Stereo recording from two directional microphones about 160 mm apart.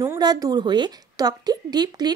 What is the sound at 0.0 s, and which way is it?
Speech, 20° right (ahead or behind).